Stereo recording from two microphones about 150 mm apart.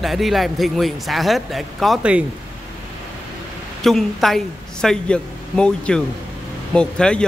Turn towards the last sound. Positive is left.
turn(degrees=5)  # may be behind; listen again after turning